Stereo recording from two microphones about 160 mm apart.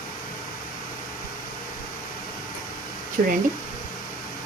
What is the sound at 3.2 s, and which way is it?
Speech, 60° right (ahead or behind).